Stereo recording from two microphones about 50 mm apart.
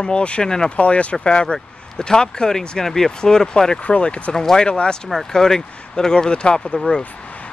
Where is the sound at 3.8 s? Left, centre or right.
Left.